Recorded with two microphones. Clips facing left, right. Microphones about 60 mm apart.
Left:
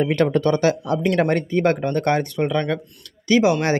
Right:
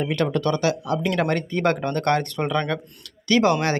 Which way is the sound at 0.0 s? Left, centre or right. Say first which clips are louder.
Left 4 dB; left.